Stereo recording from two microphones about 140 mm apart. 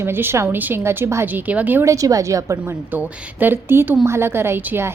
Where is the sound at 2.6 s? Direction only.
10° right (ahead or behind).